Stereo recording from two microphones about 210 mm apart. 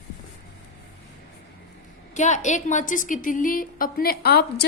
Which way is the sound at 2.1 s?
35° left (ahead or behind).